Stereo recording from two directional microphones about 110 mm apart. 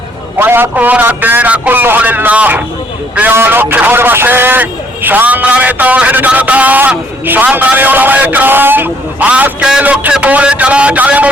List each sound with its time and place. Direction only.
0.3 s a man's voice: 20° right (ahead or behind)